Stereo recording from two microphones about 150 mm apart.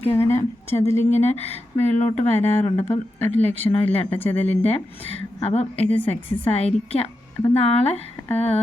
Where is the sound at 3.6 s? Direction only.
25° left (ahead or behind).